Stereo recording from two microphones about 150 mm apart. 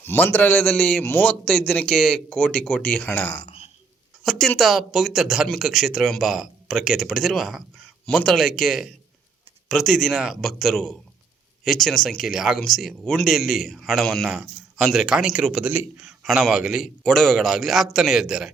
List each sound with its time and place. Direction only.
0.0 s a man's voice: 15° left (ahead or behind)
3.3 s a sound: 35° left (ahead or behind)
4.2 s speech: centre (ahead or behind)